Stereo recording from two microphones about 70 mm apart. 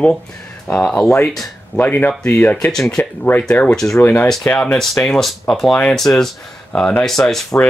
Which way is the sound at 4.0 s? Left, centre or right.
Left.